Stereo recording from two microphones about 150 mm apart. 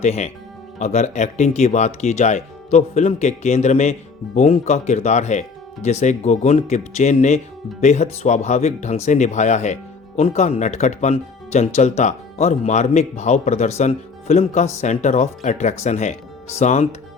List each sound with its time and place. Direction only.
0.0 s speech: 50° left (ahead or behind)